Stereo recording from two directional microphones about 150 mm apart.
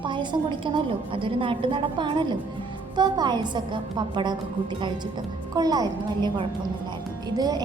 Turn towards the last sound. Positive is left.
turn(degrees=-25)  # may be behind; listen again after turning